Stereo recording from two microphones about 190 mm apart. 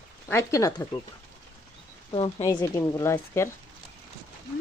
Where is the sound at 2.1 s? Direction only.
25° left (ahead or behind).